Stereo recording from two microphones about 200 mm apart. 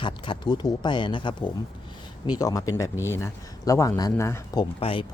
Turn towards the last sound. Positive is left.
turn(degrees=25)  # may be behind; listen again after turning